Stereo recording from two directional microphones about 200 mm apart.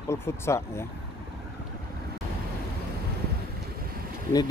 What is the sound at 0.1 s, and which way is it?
Speech, 15° left (ahead or behind).